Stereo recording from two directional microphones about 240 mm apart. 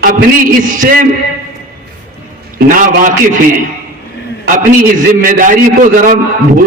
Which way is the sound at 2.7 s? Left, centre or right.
Right.